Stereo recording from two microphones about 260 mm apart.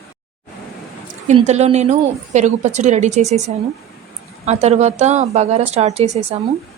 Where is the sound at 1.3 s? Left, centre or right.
Right.